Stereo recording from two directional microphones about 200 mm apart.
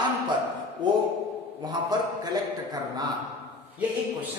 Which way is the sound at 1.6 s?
20° right (ahead or behind).